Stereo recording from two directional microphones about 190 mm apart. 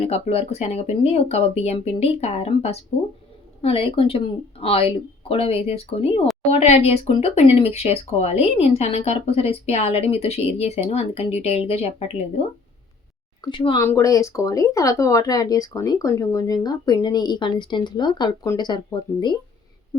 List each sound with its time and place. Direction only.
0.0 s speech: 30° left (ahead or behind)
13.4 s speech: 25° left (ahead or behind)
19.9 s a sound: 10° left (ahead or behind)